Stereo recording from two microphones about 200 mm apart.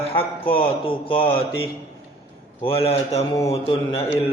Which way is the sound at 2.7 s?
30° left (ahead or behind).